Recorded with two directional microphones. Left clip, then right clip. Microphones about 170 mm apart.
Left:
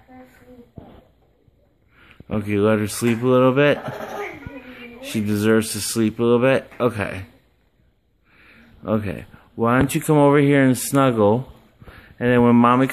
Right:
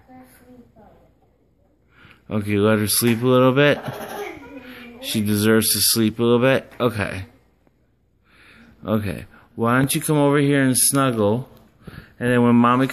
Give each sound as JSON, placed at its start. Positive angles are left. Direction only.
{"t": 2.0, "sound": "speech", "side_deg": 5}
{"t": 8.3, "sound": "a sound", "side_deg": 0}
{"t": 9.8, "sound": "speech", "side_deg": 25}